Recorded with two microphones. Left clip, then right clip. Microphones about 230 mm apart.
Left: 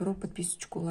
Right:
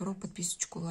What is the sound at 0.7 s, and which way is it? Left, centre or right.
Speech, centre.